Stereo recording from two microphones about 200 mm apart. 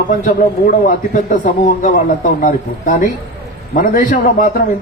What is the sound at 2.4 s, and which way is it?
A man's voice, 40° left (ahead or behind).